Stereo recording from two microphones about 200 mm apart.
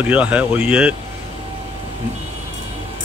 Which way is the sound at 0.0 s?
5° right (ahead or behind).